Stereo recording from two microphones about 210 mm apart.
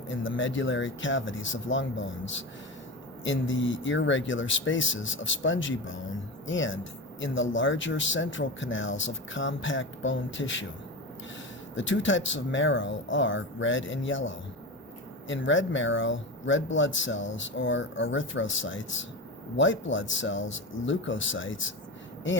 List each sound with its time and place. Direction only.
0.1 s speech: 65° left (ahead or behind)
11.7 s speech: 60° left (ahead or behind)